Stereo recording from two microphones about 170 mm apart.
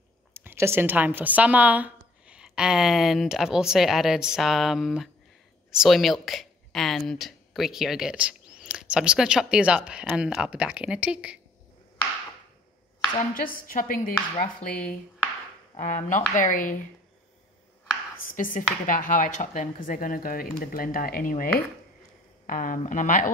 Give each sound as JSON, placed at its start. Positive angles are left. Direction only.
{"t": 0.3, "sound": "a woman's voice", "side_deg": -15}
{"t": 13.2, "sound": "a woman's voice", "side_deg": 55}
{"t": 18.2, "sound": "speech", "side_deg": 55}